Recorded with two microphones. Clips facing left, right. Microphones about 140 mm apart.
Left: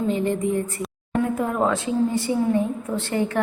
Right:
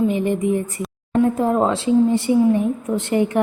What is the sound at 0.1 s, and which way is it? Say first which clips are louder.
Speech: right 3 dB; 15° right (ahead or behind).